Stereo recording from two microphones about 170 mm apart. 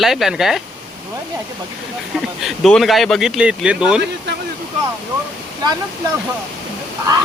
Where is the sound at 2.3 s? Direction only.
Centre (ahead or behind).